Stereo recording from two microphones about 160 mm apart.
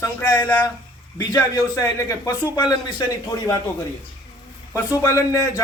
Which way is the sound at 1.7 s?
20° left (ahead or behind).